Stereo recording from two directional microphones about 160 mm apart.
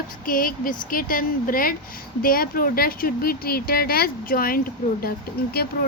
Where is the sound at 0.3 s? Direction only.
60° left (ahead or behind).